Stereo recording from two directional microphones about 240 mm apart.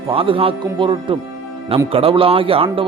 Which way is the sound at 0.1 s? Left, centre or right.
Right.